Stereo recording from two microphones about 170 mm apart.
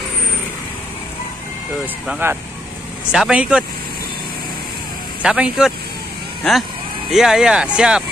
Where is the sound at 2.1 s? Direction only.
10° right (ahead or behind).